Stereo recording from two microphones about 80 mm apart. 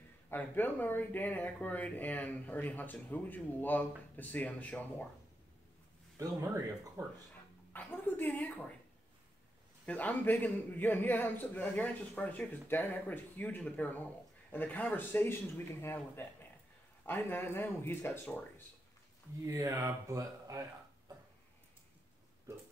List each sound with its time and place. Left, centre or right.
0.3 s speech: left
6.4 s speech: right
7.7 s a woman's voice: left
9.8 s speech: left
19.4 s speech: right